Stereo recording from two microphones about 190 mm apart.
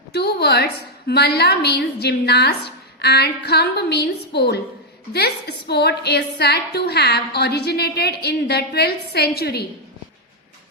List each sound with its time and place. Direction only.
0.1 s a woman's voice: 60° left (ahead or behind)